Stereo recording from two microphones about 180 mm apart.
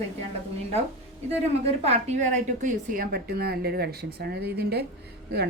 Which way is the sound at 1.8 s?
40° right (ahead or behind).